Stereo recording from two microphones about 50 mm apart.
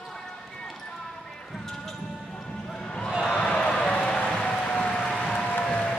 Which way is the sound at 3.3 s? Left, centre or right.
Centre.